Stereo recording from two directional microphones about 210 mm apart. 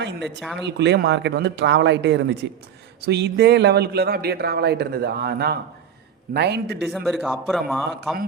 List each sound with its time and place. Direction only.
0.0 s a sound: 55° right (ahead or behind)
0.6 s speech: 55° right (ahead or behind)
6.8 s a man's voice: centre (ahead or behind)